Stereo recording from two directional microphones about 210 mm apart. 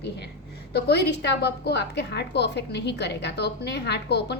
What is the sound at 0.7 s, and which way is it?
A woman's voice, 50° left (ahead or behind).